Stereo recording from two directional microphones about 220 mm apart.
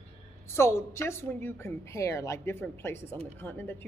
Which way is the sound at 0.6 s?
10° left (ahead or behind).